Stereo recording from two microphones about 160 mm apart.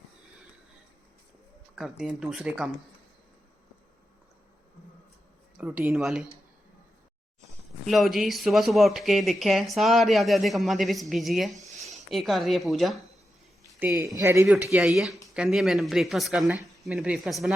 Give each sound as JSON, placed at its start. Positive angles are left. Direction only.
{"t": 1.7, "sound": "speech", "side_deg": -5}
{"t": 5.5, "sound": "speech", "side_deg": -10}
{"t": 7.9, "sound": "speech", "side_deg": 0}
{"t": 13.7, "sound": "speech", "side_deg": -10}
{"t": 14.4, "sound": "speech", "side_deg": -5}